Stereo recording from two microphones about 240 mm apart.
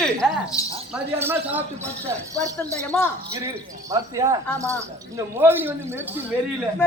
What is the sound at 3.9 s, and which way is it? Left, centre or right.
Speech, centre.